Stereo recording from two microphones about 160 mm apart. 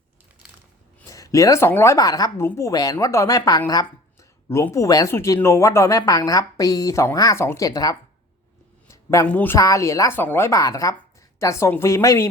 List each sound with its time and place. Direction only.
1.0 s a woman's voice: 20° left (ahead or behind)
8.9 s a sound: 20° left (ahead or behind)
9.2 s a woman's voice: 10° left (ahead or behind)
9.6 s a woman's voice: 20° left (ahead or behind)